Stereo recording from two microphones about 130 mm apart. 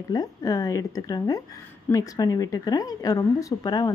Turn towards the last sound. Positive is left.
turn(degrees=30)  # may be behind; listen again after turning